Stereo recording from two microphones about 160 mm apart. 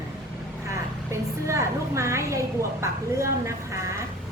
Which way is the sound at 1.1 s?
20° right (ahead or behind).